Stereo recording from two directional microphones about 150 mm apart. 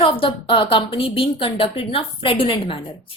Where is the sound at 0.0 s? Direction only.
35° left (ahead or behind).